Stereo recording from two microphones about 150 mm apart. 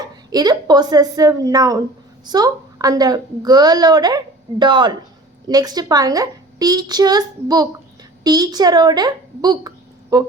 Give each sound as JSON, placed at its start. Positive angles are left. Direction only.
{"t": 0.0, "sound": "a woman's voice", "side_deg": -25}